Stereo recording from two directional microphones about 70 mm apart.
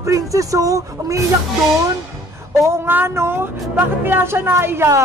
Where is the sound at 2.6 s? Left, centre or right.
Right.